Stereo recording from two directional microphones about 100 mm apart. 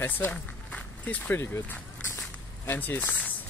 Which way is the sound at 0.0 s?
15° left (ahead or behind).